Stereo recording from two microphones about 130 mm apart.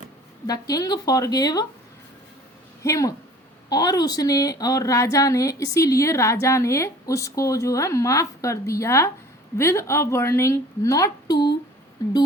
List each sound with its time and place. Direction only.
0.4 s a woman's voice: 30° left (ahead or behind)
2.8 s a woman's voice: 25° left (ahead or behind)